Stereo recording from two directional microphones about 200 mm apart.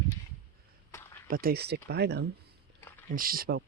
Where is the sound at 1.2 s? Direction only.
45° right (ahead or behind).